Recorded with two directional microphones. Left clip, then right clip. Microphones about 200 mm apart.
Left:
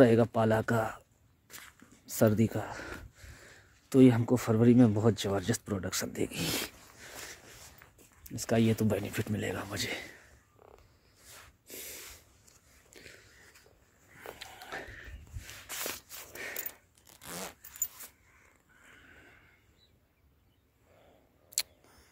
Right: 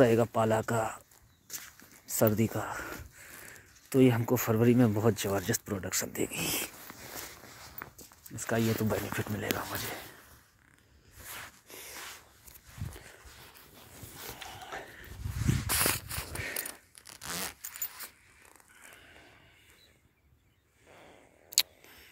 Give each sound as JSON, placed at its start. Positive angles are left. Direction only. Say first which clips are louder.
{"t": 0.0, "sound": "speech", "louder": "left 1 dB", "side_deg": 20}
{"t": 1.5, "sound": "walk", "louder": "right 4 dB", "side_deg": -50}
{"t": 2.1, "sound": "speech", "louder": "even", "side_deg": 15}
{"t": 7.8, "sound": "walk", "louder": "right 12 dB", "side_deg": -35}
{"t": 8.4, "sound": "speech", "louder": "left 2 dB", "side_deg": 25}
{"t": 11.6, "sound": "snort", "louder": "even", "side_deg": 40}
{"t": 14.4, "sound": "a sound", "louder": "even", "side_deg": 30}
{"t": 15.6, "sound": "a sound", "louder": "right 8 dB", "side_deg": -40}
{"t": 16.5, "sound": "zipper", "louder": "right 4 dB", "side_deg": -35}
{"t": 21.5, "sound": "a sound", "louder": "right 7 dB", "side_deg": 5}